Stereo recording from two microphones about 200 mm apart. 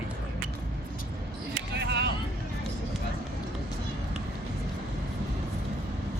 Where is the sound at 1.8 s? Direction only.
60° right (ahead or behind).